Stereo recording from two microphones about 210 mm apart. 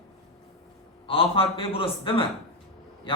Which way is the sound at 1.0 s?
25° left (ahead or behind).